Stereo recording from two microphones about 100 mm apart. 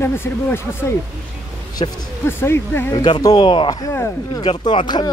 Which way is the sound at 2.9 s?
45° left (ahead or behind).